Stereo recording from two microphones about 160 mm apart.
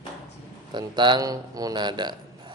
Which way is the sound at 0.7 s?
30° right (ahead or behind).